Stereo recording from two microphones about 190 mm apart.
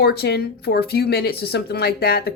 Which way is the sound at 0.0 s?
55° left (ahead or behind).